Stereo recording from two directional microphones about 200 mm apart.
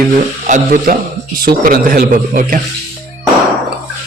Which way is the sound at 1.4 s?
45° right (ahead or behind).